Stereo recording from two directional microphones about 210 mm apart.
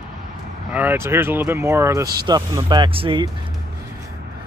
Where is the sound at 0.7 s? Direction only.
10° right (ahead or behind).